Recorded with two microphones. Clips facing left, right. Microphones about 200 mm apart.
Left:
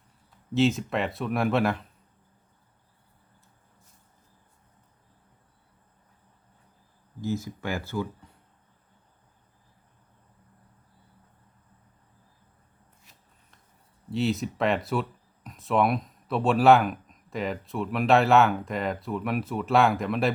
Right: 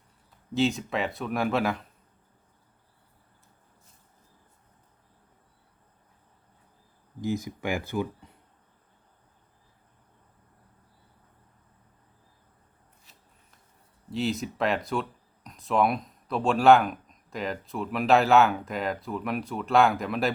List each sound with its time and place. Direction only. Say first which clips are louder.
0.5 s speech: left 2 dB; centre (ahead or behind)
7.2 s speech: right 1 dB; 15° right (ahead or behind)
14.1 s speech: left 2 dB; centre (ahead or behind)